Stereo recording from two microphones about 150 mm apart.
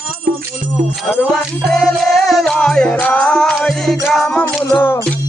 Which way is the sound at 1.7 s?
Centre (ahead or behind).